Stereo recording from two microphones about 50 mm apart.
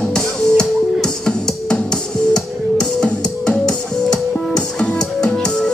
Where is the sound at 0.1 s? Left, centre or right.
Centre.